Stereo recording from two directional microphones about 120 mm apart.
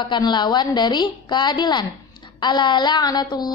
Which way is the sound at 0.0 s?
40° left (ahead or behind).